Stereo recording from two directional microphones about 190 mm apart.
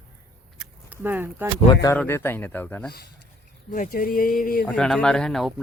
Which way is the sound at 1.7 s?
20° left (ahead or behind).